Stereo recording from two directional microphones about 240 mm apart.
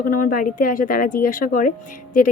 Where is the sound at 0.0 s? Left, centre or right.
Left.